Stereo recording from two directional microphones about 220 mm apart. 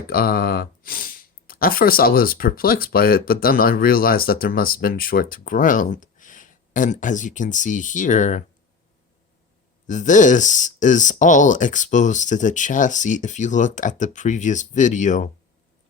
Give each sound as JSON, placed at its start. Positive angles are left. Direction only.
{"t": 0.1, "sound": "speech", "side_deg": 45}
{"t": 9.8, "sound": "speech", "side_deg": 35}